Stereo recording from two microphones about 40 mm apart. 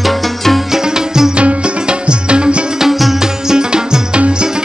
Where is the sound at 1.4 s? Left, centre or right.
Right.